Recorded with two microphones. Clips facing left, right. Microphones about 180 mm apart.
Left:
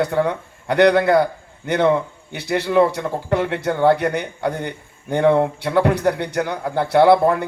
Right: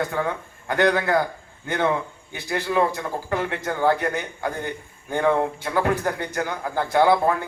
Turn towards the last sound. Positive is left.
turn(degrees=70)  # may be behind; listen again after turning